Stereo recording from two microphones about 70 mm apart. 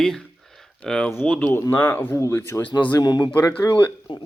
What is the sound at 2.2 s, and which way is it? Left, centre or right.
Speech, left.